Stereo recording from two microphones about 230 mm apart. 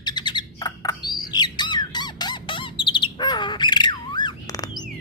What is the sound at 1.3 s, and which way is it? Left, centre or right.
Squawk, centre.